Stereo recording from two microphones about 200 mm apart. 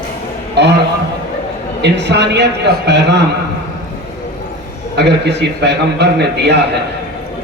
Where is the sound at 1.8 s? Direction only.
60° right (ahead or behind).